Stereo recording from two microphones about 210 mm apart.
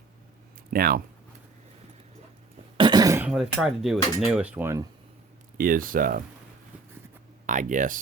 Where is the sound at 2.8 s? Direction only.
20° right (ahead or behind); by 4.0 s centre (ahead or behind).